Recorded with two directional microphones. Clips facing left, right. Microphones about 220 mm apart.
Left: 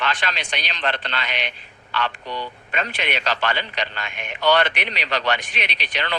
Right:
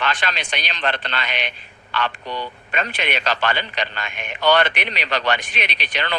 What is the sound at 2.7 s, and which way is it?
A man's voice, 50° right (ahead or behind).